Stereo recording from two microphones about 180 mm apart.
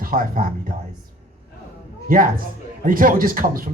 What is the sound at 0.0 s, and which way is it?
Speech, 50° right (ahead or behind).